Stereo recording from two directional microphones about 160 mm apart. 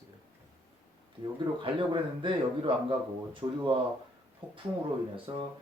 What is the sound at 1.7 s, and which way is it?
A man's voice, 30° right (ahead or behind).